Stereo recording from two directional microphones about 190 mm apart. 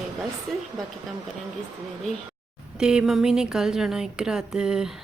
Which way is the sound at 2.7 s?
5° right (ahead or behind).